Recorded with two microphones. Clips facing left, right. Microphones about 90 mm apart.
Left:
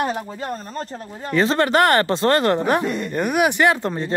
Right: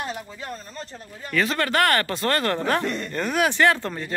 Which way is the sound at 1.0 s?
25° left (ahead or behind).